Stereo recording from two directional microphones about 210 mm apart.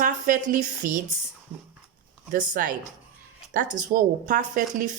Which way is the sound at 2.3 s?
40° right (ahead or behind).